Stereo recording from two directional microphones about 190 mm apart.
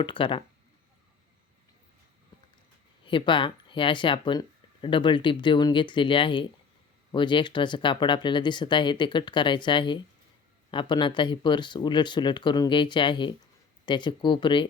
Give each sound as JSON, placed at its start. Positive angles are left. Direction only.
{"t": 0.0, "sound": "speech", "side_deg": 25}
{"t": 3.0, "sound": "speech", "side_deg": 25}